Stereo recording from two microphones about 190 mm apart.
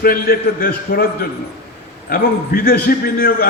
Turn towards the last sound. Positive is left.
turn(degrees=50)  # may be behind; listen again after turning